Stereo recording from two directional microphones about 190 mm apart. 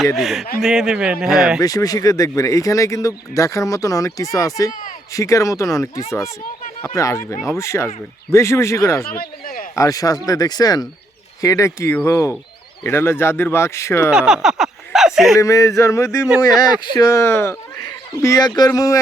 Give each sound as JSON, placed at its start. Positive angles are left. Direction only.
{"t": 0.0, "sound": "speech", "side_deg": 0}
{"t": 1.6, "sound": "speech", "side_deg": 20}
{"t": 9.0, "sound": "speech", "side_deg": 50}
{"t": 9.7, "sound": "speech", "side_deg": 20}
{"t": 14.1, "sound": "a sound", "side_deg": -5}
{"t": 15.4, "sound": "speech", "side_deg": 15}